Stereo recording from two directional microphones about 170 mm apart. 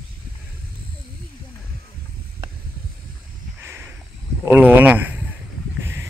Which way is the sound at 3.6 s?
10° right (ahead or behind).